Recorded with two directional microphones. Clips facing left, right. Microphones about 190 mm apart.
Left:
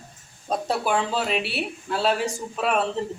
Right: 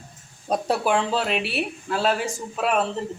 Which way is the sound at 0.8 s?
5° left (ahead or behind).